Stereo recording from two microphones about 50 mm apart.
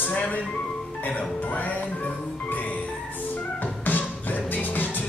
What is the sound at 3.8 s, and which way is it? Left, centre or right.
Music, left.